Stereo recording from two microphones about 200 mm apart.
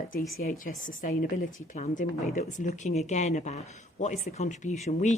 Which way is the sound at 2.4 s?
40° left (ahead or behind).